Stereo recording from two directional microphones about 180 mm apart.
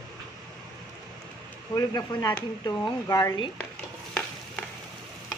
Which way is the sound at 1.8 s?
20° left (ahead or behind).